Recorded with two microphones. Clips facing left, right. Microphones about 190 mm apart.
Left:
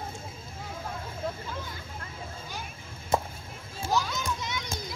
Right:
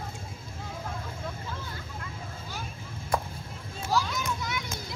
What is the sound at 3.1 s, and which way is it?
Chop, 25° left (ahead or behind).